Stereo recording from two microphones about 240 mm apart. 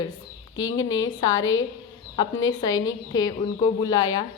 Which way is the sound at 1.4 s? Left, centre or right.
Left.